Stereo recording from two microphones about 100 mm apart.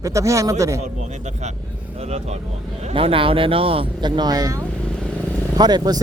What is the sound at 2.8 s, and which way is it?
Speech, 65° right (ahead or behind).